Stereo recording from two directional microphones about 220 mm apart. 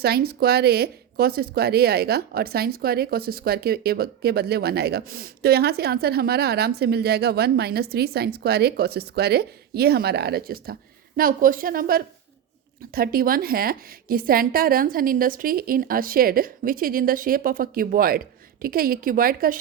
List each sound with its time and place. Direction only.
0.0 s a woman's voice: 45° right (ahead or behind)